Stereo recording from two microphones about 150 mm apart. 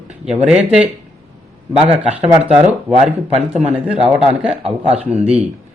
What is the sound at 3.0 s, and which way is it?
Speech, 50° right (ahead or behind).